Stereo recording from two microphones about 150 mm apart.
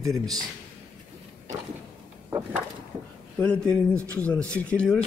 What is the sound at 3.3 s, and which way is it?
Speech, 10° left (ahead or behind).